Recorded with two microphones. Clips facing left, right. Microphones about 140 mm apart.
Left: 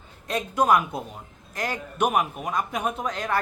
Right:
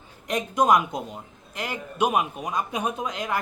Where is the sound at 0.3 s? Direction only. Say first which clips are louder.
Right 1 dB; 15° right (ahead or behind).